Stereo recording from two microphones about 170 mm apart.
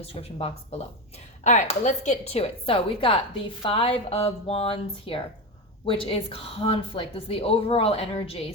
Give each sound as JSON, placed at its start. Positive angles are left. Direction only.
{"t": 0.0, "sound": "a woman's voice", "side_deg": 35}